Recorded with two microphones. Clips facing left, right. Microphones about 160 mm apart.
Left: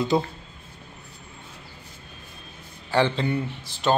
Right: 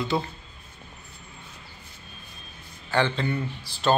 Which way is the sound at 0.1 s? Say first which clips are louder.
Left 4 dB; 20° left (ahead or behind).